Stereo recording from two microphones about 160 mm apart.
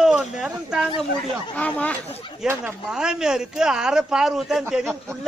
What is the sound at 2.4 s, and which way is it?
A man's voice, 5° right (ahead or behind).